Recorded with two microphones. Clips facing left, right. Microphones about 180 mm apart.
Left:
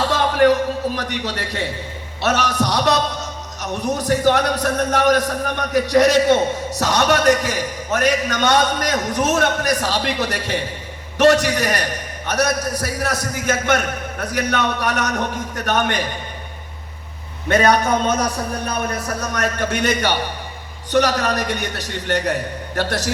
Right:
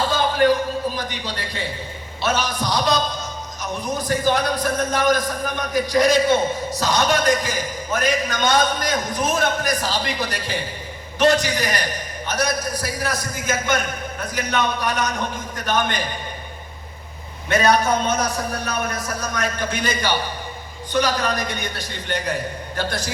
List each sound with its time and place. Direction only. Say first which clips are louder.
0.0 s a man's voice: left 3 dB; 75° left (ahead or behind)
17.5 s a man's voice: left 2 dB; 55° left (ahead or behind)
18.2 s a man's voice: left 2 dB; 35° left (ahead or behind)
19.2 s a man's voice: left 3 dB; 70° left (ahead or behind)